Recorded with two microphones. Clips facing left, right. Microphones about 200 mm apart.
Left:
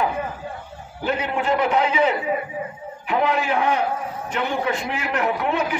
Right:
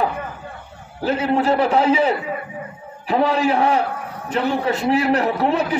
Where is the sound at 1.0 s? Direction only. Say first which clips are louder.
Right 5 dB; 35° right (ahead or behind).